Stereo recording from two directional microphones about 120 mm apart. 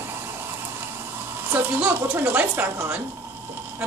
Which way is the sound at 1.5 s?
15° right (ahead or behind).